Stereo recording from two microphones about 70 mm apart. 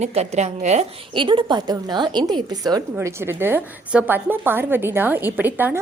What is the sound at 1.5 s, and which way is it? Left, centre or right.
A woman's voice, right.